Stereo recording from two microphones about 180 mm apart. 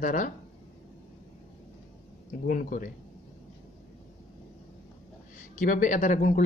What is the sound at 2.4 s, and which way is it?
Speech, 50° left (ahead or behind).